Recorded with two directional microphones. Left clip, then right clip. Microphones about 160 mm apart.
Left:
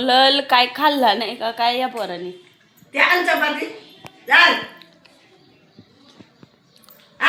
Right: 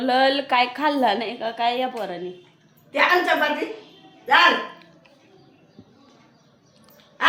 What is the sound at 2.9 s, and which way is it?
Speech, 10° right (ahead or behind).